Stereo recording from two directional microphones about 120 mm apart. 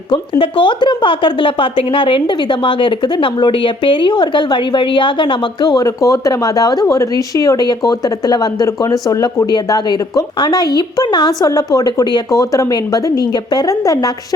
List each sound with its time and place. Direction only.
0.1 s a woman's voice: 45° left (ahead or behind)